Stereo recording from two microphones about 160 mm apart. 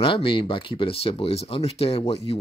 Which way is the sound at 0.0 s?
30° left (ahead or behind).